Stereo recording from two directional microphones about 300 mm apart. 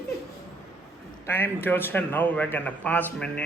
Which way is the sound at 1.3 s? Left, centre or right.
Centre.